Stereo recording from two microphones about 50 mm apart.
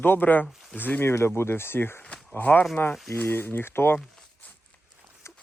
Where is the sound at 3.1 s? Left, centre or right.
Left.